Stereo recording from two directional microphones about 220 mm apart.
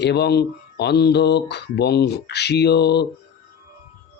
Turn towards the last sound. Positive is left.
turn(degrees=50)  # may be behind; listen again after turning